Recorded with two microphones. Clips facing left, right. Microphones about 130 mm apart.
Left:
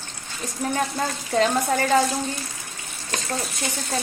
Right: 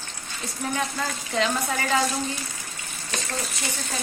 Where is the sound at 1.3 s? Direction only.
40° left (ahead or behind).